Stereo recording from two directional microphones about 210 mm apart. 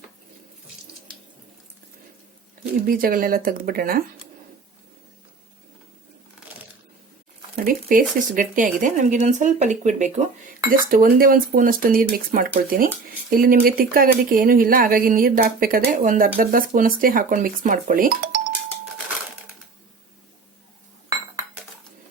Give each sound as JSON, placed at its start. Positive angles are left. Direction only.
{"t": 2.8, "sound": "speech", "side_deg": -45}
{"t": 7.5, "sound": "speech", "side_deg": -40}